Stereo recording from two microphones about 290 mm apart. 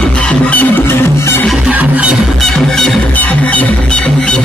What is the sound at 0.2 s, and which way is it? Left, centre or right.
Music, centre.